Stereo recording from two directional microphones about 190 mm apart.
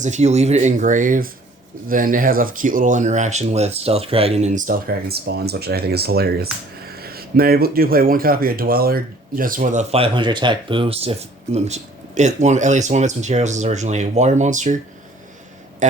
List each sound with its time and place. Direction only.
0.0 s speech: 35° right (ahead or behind)
15.8 s speech: 40° right (ahead or behind)